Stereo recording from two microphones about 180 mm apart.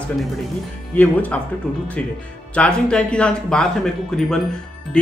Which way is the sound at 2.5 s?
5° left (ahead or behind).